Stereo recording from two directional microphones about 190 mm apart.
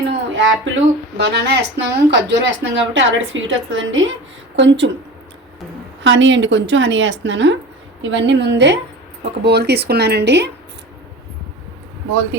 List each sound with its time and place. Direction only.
0.1 s music: 75° right (ahead or behind)
1.2 s speech: 60° right (ahead or behind); by 4.1 s 80° right
4.5 s speech: 70° right (ahead or behind)
6.0 s speech: 75° right (ahead or behind)